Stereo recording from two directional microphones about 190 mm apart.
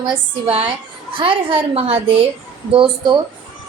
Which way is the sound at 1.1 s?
30° right (ahead or behind).